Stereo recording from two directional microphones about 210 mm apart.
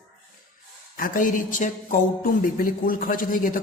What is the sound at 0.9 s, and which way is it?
Speech, 40° left (ahead or behind).